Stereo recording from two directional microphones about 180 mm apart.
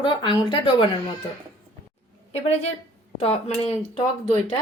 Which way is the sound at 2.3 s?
35° left (ahead or behind).